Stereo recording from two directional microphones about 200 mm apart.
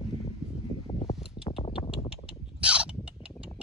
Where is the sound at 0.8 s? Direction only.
20° left (ahead or behind).